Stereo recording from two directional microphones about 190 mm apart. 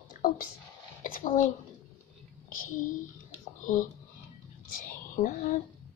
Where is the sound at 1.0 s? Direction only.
45° left (ahead or behind).